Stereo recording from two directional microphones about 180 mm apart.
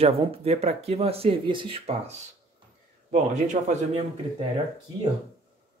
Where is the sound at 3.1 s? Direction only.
40° right (ahead or behind).